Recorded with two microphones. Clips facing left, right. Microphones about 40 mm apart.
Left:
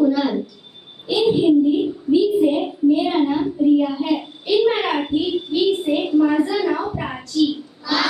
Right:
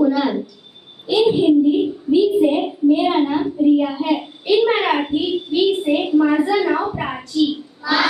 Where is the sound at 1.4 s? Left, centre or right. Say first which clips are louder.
Right 1 dB; right.